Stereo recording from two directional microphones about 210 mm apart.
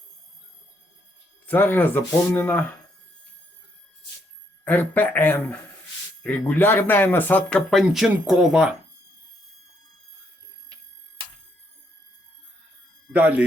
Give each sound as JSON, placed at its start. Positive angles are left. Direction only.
{"t": 1.5, "sound": "speech", "side_deg": 10}
{"t": 4.6, "sound": "speech", "side_deg": 10}
{"t": 13.1, "sound": "speech", "side_deg": -5}